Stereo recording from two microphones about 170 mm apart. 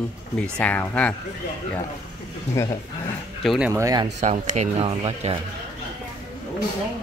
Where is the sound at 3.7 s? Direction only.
20° right (ahead or behind).